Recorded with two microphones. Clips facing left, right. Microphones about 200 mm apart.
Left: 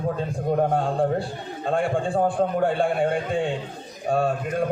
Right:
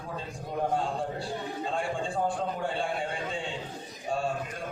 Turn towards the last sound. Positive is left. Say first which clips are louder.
# left 9 dB
turn(degrees=60)  # may be behind; listen again after turning